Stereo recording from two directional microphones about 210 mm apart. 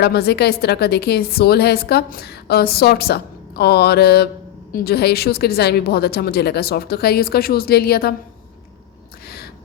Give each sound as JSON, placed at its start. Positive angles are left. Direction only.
{"t": 0.0, "sound": "a woman's voice", "side_deg": 50}